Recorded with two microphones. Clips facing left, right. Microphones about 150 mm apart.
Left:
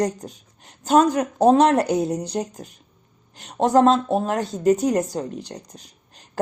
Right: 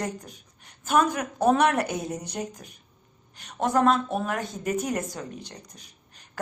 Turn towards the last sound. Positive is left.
turn(degrees=35)  # may be behind; listen again after turning